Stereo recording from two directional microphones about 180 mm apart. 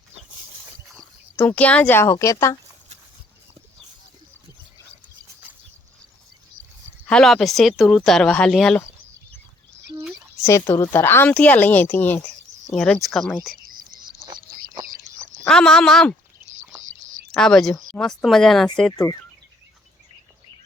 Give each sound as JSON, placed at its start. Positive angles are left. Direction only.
{"t": 0.9, "sound": "speech", "side_deg": 5}
{"t": 7.1, "sound": "speech", "side_deg": 5}
{"t": 10.0, "sound": "a sound", "side_deg": 0}
{"t": 10.4, "sound": "a woman's voice", "side_deg": 15}
{"t": 13.6, "sound": "whispering", "side_deg": -50}
{"t": 15.4, "sound": "speech", "side_deg": 5}
{"t": 17.0, "sound": "a sound", "side_deg": -40}
{"t": 17.3, "sound": "speech", "side_deg": 5}